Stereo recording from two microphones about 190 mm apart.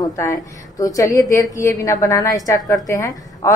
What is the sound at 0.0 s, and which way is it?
A woman's voice, 15° left (ahead or behind).